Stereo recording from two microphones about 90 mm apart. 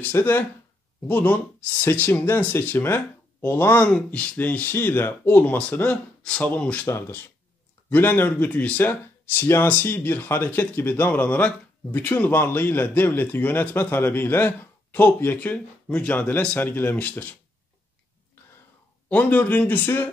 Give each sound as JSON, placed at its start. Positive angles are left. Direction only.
{"t": 0.0, "sound": "speech", "side_deg": 25}
{"t": 6.9, "sound": "speech", "side_deg": 30}
{"t": 19.0, "sound": "speech", "side_deg": 20}